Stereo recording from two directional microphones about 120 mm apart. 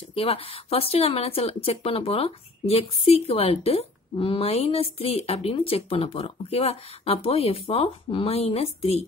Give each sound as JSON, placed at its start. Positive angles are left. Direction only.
{"t": 0.1, "sound": "speech", "side_deg": 50}